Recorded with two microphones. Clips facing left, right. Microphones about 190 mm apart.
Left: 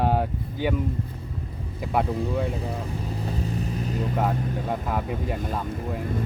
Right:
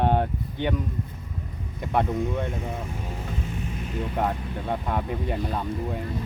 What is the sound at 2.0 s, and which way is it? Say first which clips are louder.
Speech: left 1 dB; 30° left (ahead or behind).